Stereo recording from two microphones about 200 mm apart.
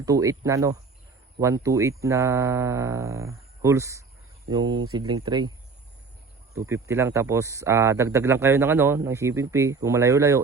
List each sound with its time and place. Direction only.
0.0 s speech: 15° right (ahead or behind)
6.5 s speech: 15° right (ahead or behind)